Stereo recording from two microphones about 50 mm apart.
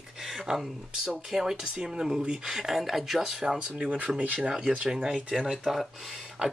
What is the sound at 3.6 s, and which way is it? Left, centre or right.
Speech, right.